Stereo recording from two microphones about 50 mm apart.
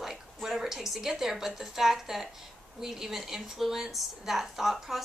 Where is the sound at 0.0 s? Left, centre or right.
Centre.